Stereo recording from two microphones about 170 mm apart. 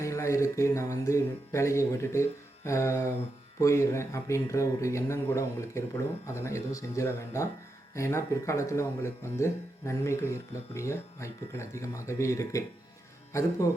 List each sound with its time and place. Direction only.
0.0 s speech: 15° left (ahead or behind)